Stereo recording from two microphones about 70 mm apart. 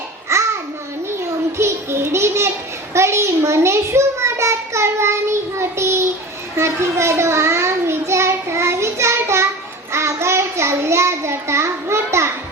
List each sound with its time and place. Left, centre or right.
0.3 s babbling: right
1.5 s a child's voice: right
9.9 s child singing: right